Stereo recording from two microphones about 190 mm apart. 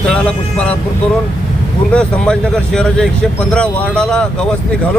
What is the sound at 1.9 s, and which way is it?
Speech, 5° left (ahead or behind).